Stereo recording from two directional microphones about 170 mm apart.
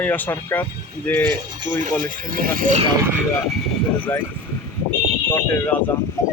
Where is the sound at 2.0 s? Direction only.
50° right (ahead or behind).